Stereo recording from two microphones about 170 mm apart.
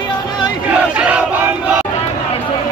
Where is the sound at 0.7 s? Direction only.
10° right (ahead or behind).